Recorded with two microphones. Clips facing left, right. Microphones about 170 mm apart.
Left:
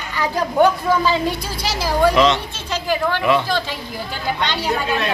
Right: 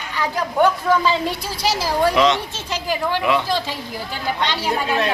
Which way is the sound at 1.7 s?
10° right (ahead or behind).